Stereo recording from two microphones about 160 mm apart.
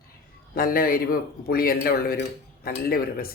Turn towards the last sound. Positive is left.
turn(degrees=70)  # may be behind; listen again after turning